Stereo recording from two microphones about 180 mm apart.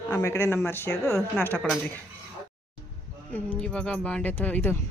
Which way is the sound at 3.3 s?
5° left (ahead or behind).